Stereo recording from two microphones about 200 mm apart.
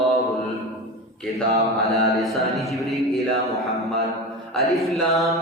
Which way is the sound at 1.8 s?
Centre (ahead or behind).